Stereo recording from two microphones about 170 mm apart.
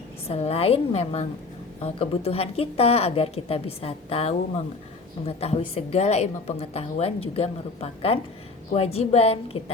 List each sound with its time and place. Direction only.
0.3 s a woman's voice: 35° left (ahead or behind)